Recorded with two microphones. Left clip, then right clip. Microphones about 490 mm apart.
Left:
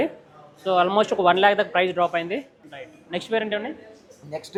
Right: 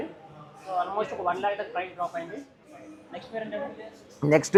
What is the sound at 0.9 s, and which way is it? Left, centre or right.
Speech, left.